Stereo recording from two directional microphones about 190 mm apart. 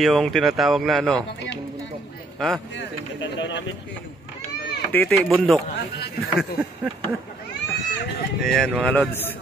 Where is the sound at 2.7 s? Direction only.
70° left (ahead or behind).